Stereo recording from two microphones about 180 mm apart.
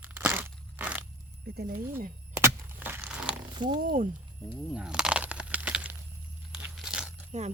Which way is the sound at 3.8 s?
50° right (ahead or behind).